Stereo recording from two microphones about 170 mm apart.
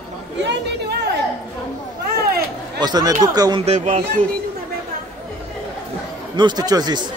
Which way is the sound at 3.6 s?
40° right (ahead or behind).